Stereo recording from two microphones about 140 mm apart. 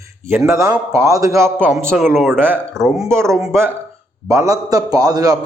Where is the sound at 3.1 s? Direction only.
20° right (ahead or behind).